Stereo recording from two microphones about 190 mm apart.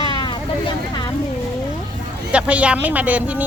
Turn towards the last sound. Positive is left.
turn(degrees=-5)  # may be behind; listen again after turning